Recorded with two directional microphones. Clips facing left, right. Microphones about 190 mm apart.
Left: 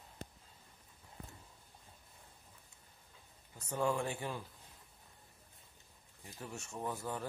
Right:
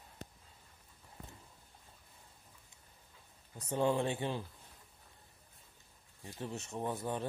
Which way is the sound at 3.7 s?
25° right (ahead or behind).